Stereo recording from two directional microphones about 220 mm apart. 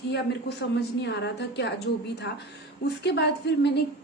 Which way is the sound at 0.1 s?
50° left (ahead or behind).